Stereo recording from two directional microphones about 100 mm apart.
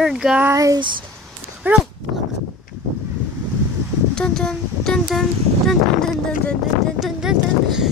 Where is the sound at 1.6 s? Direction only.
20° right (ahead or behind).